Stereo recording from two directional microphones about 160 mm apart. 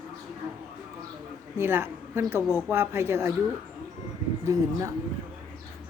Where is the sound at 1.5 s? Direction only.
15° right (ahead or behind).